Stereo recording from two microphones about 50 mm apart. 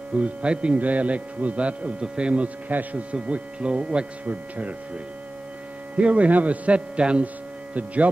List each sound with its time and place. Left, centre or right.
0.2 s speech: right
5.9 s speech: right